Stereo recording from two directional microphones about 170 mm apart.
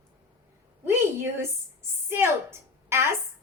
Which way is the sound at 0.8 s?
15° right (ahead or behind).